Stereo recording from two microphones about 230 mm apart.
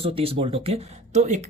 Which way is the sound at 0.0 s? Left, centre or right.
Right.